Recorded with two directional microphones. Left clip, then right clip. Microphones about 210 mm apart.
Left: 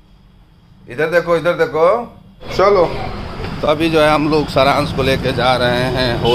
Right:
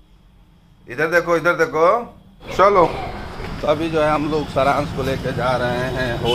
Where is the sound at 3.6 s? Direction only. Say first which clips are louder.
Left 5 dB; 10° left (ahead or behind).